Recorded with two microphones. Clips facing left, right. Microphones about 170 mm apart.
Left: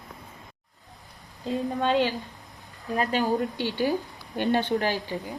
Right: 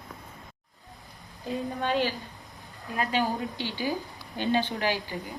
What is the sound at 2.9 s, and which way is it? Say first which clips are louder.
Speech: left 2 dB; 45° left (ahead or behind).